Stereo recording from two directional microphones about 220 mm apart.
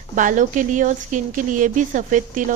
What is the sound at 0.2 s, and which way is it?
Speech, 35° right (ahead or behind).